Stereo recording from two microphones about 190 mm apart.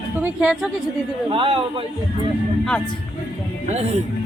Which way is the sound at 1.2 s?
25° right (ahead or behind).